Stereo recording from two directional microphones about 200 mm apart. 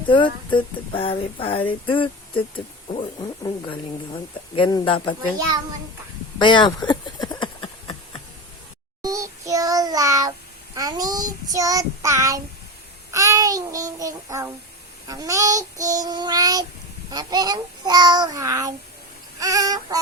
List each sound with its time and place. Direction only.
0.1 s speech: 25° left (ahead or behind)
6.4 s a sound: 25° left (ahead or behind)
9.0 s child singing: 15° right (ahead or behind)